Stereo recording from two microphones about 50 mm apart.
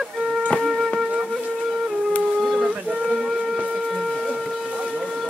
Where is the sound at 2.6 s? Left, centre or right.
Right.